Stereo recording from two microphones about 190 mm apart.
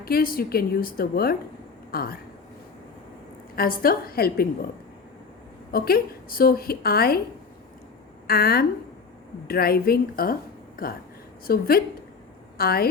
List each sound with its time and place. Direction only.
0.0 s a woman's voice: 50° left (ahead or behind)
3.5 s a woman's voice: 50° left (ahead or behind)
5.7 s a woman's voice: 55° left (ahead or behind)
8.3 s a woman's voice: 55° left (ahead or behind)